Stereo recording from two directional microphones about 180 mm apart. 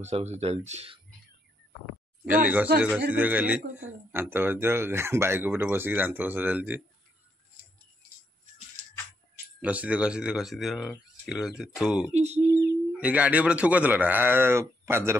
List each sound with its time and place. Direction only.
0.0 s speech: 40° right (ahead or behind)
2.2 s speech: 10° right (ahead or behind)
9.6 s speech: 10° right (ahead or behind)
12.1 s speech: 35° right (ahead or behind)
12.5 s bird: 15° right (ahead or behind)
13.0 s speech: 10° right (ahead or behind)